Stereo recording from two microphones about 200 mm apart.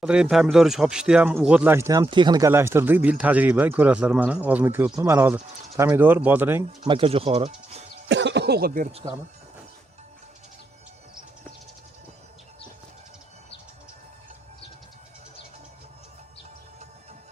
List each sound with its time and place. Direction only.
0.0 s speech: 5° right (ahead or behind)
6.8 s speech: 25° right (ahead or behind)
8.0 s speech: 60° right (ahead or behind)